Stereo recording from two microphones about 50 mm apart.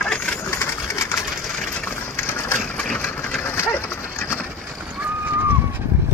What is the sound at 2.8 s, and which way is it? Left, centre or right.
Engine, left.